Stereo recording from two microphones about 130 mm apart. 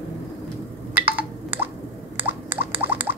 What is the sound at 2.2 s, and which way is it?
Rodents, 15° right (ahead or behind).